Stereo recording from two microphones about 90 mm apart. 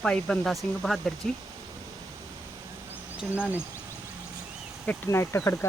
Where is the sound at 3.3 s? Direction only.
20° right (ahead or behind).